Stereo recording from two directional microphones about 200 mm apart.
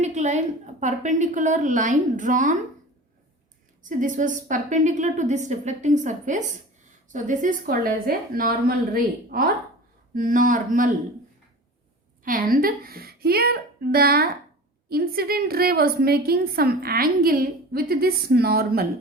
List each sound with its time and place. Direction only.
0.0 s a woman's voice: 35° right (ahead or behind)
3.8 s a woman's voice: 40° right (ahead or behind)
12.2 s a woman's voice: 45° right (ahead or behind)